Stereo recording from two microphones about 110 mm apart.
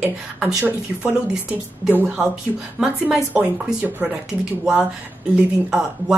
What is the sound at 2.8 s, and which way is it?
Speech, 10° right (ahead or behind).